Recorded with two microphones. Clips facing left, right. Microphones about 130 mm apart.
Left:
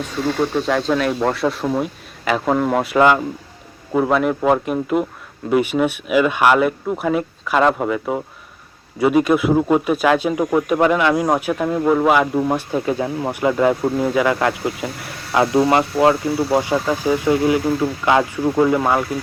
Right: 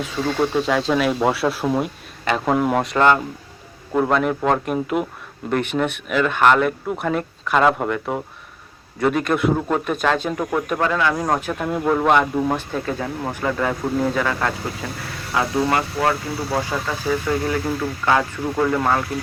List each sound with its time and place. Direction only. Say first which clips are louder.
0.5 s speech: left 1 dB; centre (ahead or behind)